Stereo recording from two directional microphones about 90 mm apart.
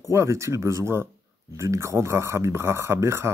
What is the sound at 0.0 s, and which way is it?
Speech, 35° right (ahead or behind).